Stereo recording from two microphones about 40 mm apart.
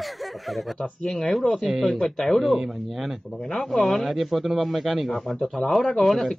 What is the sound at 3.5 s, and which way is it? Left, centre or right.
Speech, centre.